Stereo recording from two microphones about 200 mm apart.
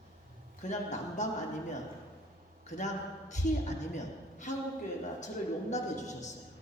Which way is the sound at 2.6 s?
35° left (ahead or behind).